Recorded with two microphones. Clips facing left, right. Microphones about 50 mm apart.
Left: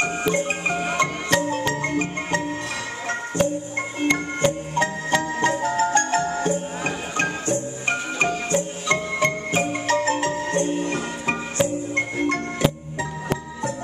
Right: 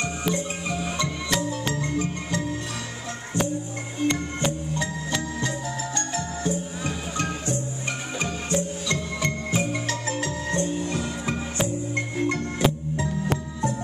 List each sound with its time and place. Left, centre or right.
0.0 s music: left
4.0 s music: left
12.3 s music: left